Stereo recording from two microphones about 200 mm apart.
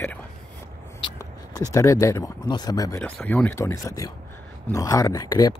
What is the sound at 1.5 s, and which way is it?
Speech, 15° left (ahead or behind).